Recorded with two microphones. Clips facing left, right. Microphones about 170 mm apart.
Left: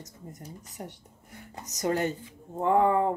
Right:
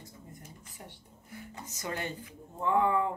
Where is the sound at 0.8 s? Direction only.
45° left (ahead or behind).